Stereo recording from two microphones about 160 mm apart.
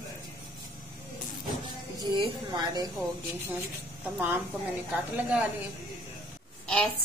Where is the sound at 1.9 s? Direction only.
30° right (ahead or behind).